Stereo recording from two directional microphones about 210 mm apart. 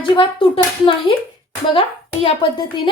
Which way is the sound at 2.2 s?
25° left (ahead or behind).